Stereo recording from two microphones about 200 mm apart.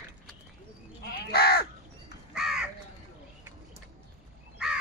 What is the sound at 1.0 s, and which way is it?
Crow, 55° left (ahead or behind).